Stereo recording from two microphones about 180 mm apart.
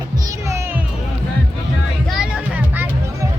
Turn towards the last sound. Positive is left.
turn(degrees=-5)  # may be behind; listen again after turning